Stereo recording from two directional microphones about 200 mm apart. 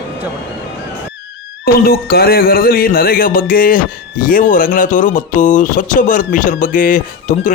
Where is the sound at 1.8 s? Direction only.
50° left (ahead or behind).